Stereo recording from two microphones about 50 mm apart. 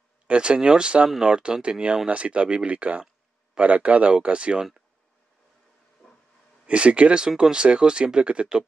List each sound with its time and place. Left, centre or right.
0.3 s speech: right
6.0 s hiss: left
6.6 s speech: right